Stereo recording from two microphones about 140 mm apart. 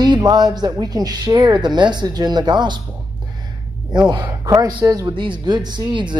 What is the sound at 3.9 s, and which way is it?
Speech, 30° right (ahead or behind).